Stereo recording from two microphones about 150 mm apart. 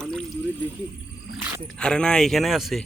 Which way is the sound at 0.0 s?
5° left (ahead or behind).